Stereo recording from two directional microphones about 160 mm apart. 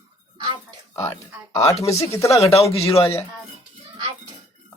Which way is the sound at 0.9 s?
15° left (ahead or behind).